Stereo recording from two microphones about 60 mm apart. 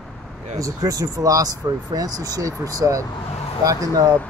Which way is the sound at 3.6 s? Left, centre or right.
Right.